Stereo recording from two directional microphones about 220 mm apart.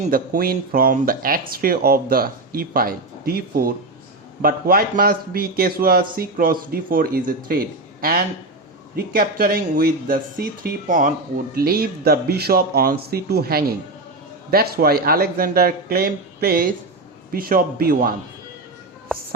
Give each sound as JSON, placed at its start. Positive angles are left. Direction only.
{"t": 0.0, "sound": "a man's voice", "side_deg": -40}